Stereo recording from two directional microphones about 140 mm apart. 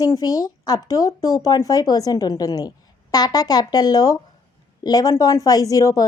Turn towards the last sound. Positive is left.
turn(degrees=25)  # may be behind; listen again after turning